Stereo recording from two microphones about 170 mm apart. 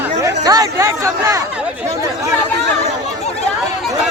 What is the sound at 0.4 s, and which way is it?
Speech, 20° right (ahead or behind).